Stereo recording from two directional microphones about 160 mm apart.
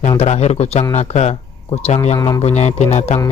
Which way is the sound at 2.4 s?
45° left (ahead or behind).